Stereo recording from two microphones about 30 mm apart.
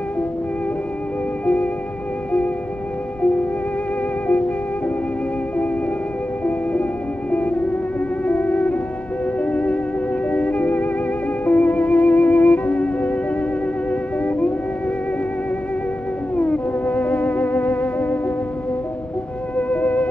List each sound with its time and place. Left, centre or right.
1.4 s music: left
3.2 s music: left
6.4 s music: left
16.3 s theremin: left
19.5 s music: left